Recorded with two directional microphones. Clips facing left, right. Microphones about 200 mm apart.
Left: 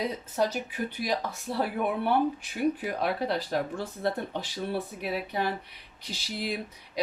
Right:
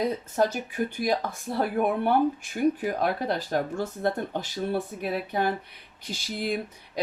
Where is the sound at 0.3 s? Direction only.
50° right (ahead or behind).